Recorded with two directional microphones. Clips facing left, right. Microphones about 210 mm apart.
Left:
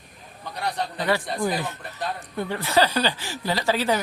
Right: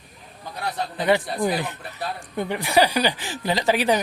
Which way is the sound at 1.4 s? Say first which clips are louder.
Right 2 dB; 15° right (ahead or behind).